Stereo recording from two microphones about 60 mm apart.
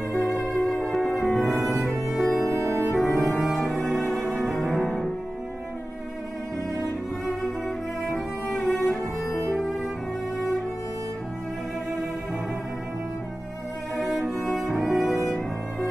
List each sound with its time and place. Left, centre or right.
0.5 s music: centre
1.6 s cello: centre
2.6 s music: right
2.9 s music: centre
7.2 s cello: centre
8.8 s music: centre
13.9 s cello: centre
15.0 s violin: centre